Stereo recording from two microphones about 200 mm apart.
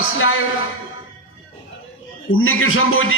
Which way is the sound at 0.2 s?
90° left.